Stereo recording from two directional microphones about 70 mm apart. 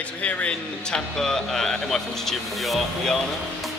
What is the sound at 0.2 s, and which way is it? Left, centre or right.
Speech, centre.